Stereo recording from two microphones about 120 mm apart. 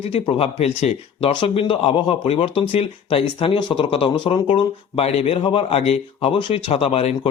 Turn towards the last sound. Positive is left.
turn(degrees=50)  # may be behind; listen again after turning